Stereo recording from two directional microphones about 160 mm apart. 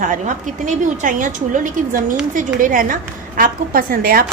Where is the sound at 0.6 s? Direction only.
55° right (ahead or behind).